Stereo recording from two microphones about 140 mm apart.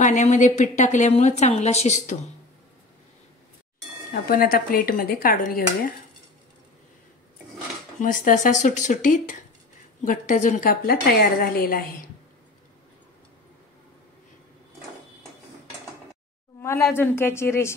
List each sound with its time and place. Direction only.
0.0 s a woman's voice: 60° left (ahead or behind)
4.1 s speech: 90° left
8.0 s a woman's voice: 75° left (ahead or behind); by 11.8 s 90° left
16.9 s speech: 15° left (ahead or behind)